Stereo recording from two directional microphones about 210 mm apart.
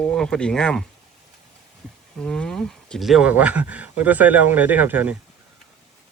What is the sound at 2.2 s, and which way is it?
Speech, 5° left (ahead or behind).